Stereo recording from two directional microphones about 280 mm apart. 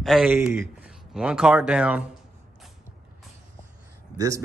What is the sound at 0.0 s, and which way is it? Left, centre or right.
Speech, centre.